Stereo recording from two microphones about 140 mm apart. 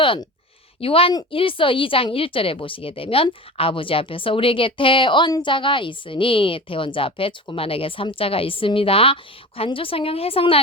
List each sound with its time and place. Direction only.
0.0 s speech: 35° left (ahead or behind)